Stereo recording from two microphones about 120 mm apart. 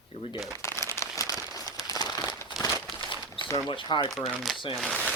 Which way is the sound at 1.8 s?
30° left (ahead or behind).